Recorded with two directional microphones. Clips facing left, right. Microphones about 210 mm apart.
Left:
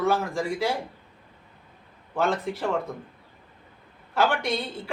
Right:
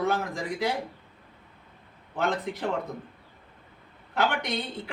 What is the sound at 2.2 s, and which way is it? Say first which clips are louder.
Speech: left 2 dB; 20° right (ahead or behind).